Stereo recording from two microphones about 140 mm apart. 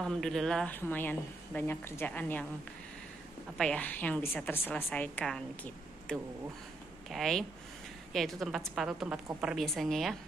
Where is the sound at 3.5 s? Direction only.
10° left (ahead or behind).